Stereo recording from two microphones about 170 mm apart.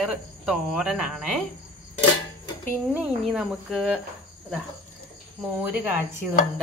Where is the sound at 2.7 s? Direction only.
10° right (ahead or behind).